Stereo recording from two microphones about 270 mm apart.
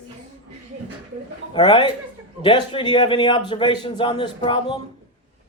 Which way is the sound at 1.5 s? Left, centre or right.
Centre.